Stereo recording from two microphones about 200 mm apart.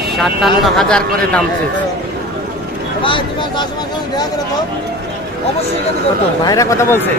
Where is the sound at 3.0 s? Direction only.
25° left (ahead or behind).